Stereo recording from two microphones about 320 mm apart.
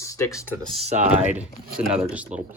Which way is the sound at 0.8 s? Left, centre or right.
Right.